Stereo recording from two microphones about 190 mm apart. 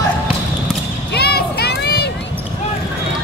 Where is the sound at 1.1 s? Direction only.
55° left (ahead or behind).